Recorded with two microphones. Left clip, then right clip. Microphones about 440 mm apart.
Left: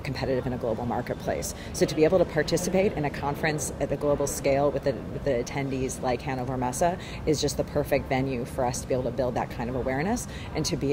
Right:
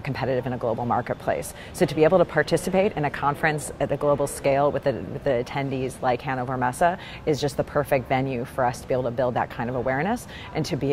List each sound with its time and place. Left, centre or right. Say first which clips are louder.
0.1 s speech: right 3 dB; right